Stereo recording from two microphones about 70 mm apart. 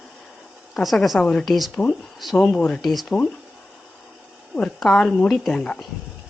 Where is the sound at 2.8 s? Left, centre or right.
Centre.